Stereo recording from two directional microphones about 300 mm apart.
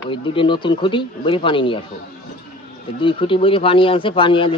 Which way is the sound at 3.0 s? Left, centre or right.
Centre.